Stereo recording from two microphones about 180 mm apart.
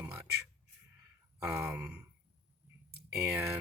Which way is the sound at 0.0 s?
10° right (ahead or behind).